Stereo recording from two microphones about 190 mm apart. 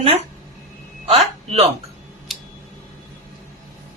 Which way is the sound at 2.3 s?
Centre (ahead or behind).